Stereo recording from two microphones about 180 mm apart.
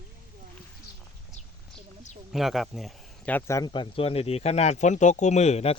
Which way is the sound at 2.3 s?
Centre (ahead or behind).